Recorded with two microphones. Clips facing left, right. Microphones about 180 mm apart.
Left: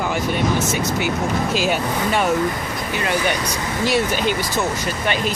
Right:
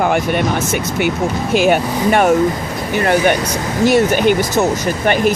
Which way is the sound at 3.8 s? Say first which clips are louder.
Right 8 dB; 55° right (ahead or behind).